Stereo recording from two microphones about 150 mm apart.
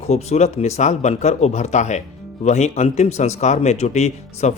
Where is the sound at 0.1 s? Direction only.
45° left (ahead or behind).